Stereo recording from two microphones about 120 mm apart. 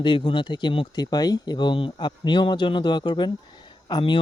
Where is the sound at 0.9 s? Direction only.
30° left (ahead or behind).